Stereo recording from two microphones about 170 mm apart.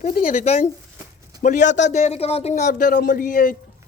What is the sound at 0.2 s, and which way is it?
A man's voice, 40° left (ahead or behind).